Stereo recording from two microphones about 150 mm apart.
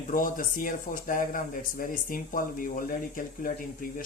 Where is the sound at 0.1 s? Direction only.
65° left (ahead or behind).